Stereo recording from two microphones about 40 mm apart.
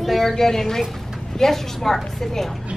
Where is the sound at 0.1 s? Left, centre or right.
Centre.